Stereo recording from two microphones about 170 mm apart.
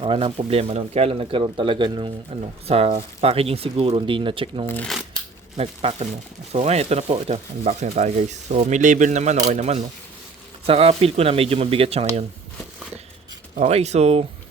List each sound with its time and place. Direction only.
0.0 s speech: 30° right (ahead or behind)
4.7 s speech: 10° left (ahead or behind)
5.5 s speech: 35° right (ahead or behind)
13.6 s speech: 40° right (ahead or behind)